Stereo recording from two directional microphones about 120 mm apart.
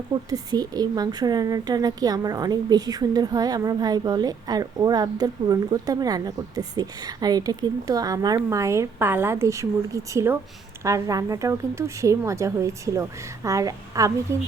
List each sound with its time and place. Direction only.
0.1 s speech: 30° right (ahead or behind)